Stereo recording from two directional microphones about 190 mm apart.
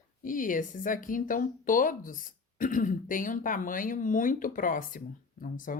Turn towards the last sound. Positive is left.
turn(degrees=45)  # may be behind; listen again after turning